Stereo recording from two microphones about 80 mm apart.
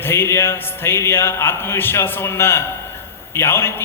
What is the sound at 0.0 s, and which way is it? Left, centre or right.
A man's voice, left.